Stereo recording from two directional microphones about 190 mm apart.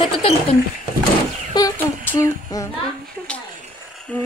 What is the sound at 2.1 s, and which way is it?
Child singing, 15° left (ahead or behind).